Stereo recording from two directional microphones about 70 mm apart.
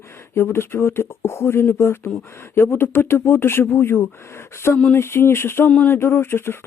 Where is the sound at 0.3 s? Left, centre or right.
Left.